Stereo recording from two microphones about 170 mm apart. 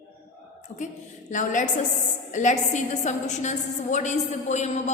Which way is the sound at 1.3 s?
50° left (ahead or behind).